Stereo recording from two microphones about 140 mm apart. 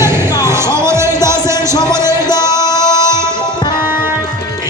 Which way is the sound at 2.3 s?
30° left (ahead or behind).